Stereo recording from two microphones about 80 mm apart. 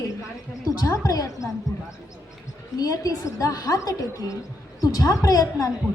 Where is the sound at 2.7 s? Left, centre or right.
Left.